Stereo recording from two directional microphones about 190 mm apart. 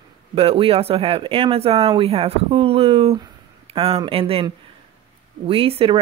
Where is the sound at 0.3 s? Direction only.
30° right (ahead or behind).